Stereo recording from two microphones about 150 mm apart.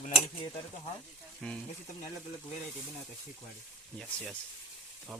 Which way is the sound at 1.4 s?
5° left (ahead or behind).